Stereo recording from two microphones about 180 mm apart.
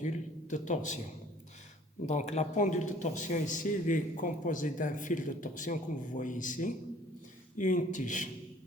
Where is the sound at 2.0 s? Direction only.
40° left (ahead or behind).